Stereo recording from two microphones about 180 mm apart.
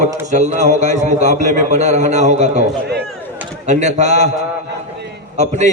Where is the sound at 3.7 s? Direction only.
40° right (ahead or behind).